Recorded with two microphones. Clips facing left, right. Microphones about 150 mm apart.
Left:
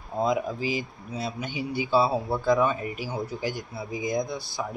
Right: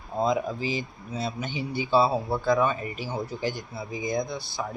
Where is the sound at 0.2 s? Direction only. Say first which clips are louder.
Even; 10° left (ahead or behind).